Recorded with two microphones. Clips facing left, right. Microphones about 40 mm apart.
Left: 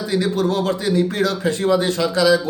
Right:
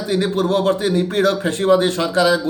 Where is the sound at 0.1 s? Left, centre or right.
Right.